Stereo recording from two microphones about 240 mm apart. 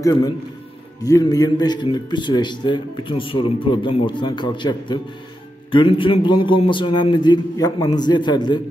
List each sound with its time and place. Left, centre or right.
0.0 s a man's voice: centre